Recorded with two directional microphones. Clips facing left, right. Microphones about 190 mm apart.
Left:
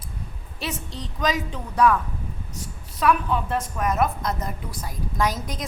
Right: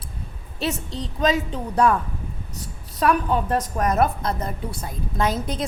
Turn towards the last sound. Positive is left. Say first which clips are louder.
# right 3 dB
turn(degrees=-30)  # may be behind; listen again after turning